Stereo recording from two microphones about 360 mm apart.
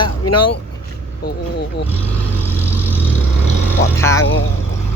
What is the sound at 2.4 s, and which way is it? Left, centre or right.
Vehicle, centre.